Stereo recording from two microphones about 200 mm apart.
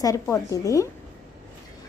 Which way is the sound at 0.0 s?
15° left (ahead or behind).